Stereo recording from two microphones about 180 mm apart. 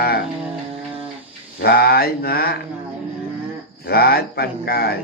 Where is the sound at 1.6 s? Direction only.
60° left (ahead or behind).